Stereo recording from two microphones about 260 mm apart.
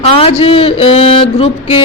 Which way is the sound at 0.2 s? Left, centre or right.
Left.